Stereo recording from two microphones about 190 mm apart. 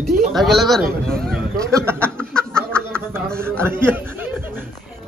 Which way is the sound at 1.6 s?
15° right (ahead or behind).